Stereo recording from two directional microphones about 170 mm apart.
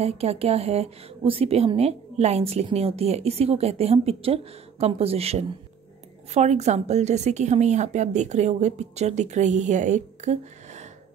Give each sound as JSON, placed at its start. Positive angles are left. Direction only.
{"t": 0.0, "sound": "a woman's voice", "side_deg": -35}